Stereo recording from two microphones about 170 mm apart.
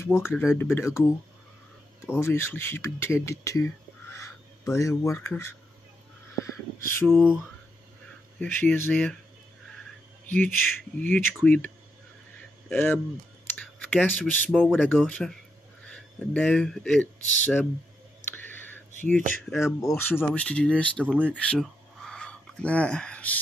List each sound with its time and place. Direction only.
0.0 s speech: 15° left (ahead or behind)
6.3 s crow: 15° left (ahead or behind)
7.1 s a sound: centre (ahead or behind)
8.4 s speech: 10° left (ahead or behind)
10.4 s speech: 10° left (ahead or behind)
15.0 s a sound: 5° left (ahead or behind)
15.9 s speech: 5° left (ahead or behind)
18.3 s whispering: 10° left (ahead or behind)
19.6 s speech: 15° left (ahead or behind)
21.1 s speech: 10° right (ahead or behind)
21.5 s a sound: 5° left (ahead or behind)